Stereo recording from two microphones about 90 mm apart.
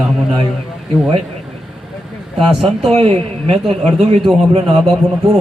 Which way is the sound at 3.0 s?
90° right.